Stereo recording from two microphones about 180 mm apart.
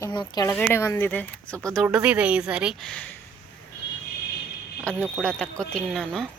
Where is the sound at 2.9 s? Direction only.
5° left (ahead or behind).